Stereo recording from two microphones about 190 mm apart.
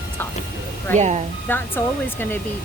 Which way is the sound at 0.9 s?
35° right (ahead or behind).